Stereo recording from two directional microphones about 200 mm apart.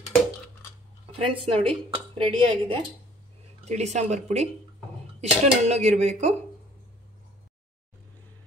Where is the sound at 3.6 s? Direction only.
35° right (ahead or behind).